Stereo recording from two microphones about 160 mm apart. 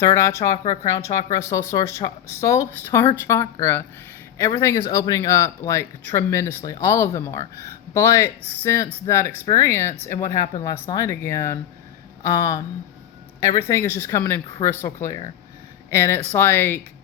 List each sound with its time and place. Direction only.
0.0 s speech: 20° left (ahead or behind)